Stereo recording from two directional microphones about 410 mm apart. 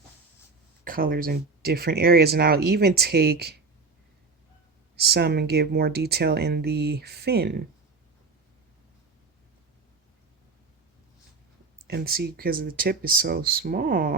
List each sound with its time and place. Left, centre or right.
0.9 s speech: right
5.1 s speech: right
11.9 s speech: right